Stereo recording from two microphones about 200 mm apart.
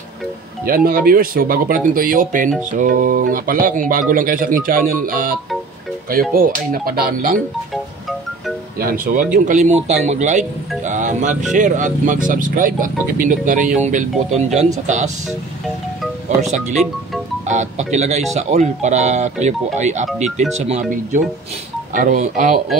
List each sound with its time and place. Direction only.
0.7 s speech: 45° right (ahead or behind)
8.7 s speech: 45° right (ahead or behind)
10.8 s music: 35° right (ahead or behind)
11.5 s speech: 40° right (ahead or behind)
16.3 s speech: 35° right (ahead or behind)
16.7 s speech: centre (ahead or behind)
17.5 s speech: 35° right (ahead or behind)